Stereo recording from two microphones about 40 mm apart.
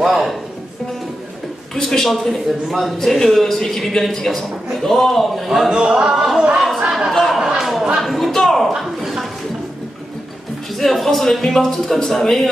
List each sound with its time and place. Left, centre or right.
0.0 s music: centre
1.8 s a man's voice: centre
5.7 s speech: centre
6.8 s chatter: centre
7.1 s a sound: centre
10.8 s speech: centre